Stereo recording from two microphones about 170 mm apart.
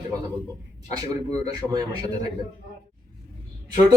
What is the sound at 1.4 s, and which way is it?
Speech, 20° right (ahead or behind).